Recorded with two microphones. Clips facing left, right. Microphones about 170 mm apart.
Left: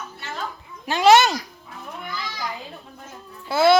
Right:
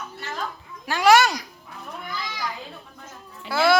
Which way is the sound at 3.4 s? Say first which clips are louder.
Left 3 dB; 20° left (ahead or behind).